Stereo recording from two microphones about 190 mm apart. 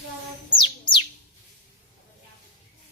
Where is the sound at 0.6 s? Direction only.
25° left (ahead or behind).